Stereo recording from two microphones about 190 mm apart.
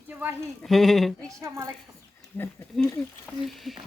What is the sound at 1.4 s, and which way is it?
Speech, 15° right (ahead or behind).